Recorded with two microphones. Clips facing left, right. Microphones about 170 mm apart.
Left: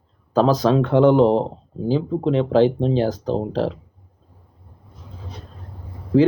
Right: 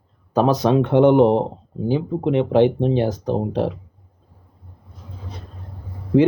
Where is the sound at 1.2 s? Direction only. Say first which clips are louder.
Right 1 dB; 60° right (ahead or behind).